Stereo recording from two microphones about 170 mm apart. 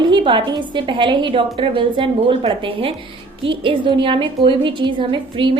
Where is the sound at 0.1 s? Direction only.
30° right (ahead or behind).